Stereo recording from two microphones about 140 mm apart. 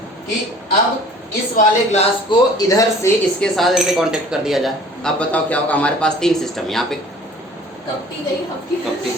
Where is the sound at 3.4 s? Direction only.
Centre (ahead or behind).